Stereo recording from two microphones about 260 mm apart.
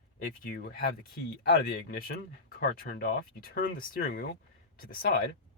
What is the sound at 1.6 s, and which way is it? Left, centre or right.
Speech, left.